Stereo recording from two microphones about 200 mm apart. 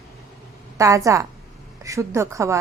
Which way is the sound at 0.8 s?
15° right (ahead or behind).